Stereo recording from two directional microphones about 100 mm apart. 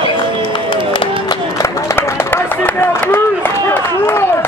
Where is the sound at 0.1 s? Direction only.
55° left (ahead or behind).